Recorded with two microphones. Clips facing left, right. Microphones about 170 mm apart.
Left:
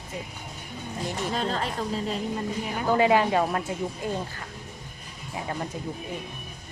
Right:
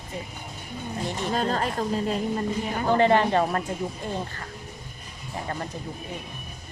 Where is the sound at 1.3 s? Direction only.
45° right (ahead or behind).